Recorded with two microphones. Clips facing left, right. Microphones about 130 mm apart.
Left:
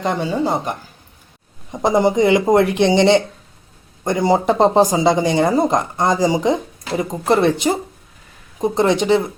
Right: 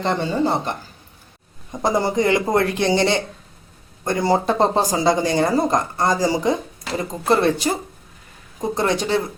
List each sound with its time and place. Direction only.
0.0 s speech: 10° left (ahead or behind)